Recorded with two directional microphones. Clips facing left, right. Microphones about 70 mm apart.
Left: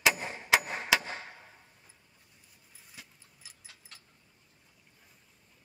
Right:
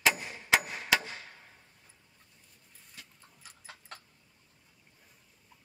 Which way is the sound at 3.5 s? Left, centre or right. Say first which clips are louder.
Right 7 dB; right.